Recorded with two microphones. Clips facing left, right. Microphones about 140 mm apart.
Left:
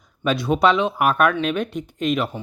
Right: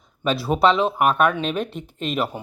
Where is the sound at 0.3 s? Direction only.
5° right (ahead or behind).